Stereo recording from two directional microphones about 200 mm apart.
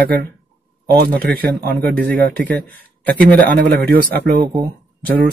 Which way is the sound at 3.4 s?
55° right (ahead or behind).